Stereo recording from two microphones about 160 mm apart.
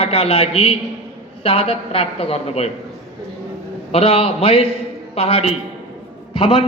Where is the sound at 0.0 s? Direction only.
35° left (ahead or behind).